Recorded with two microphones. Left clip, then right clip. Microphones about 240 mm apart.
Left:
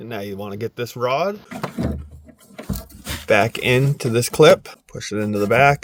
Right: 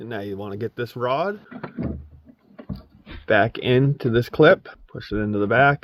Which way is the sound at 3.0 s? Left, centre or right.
Left.